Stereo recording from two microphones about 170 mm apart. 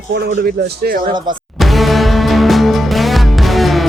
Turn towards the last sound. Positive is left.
turn(degrees=0)  # may be behind; listen again after turning